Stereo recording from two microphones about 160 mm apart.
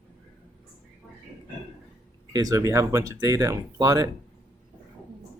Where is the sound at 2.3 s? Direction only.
20° right (ahead or behind).